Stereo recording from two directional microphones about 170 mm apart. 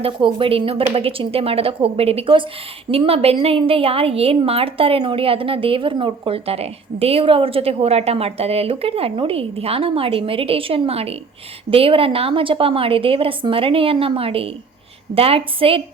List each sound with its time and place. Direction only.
0.0 s a woman's voice: 30° right (ahead or behind)